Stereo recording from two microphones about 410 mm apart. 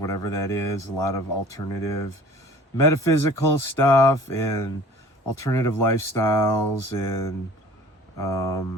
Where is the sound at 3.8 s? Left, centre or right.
Centre.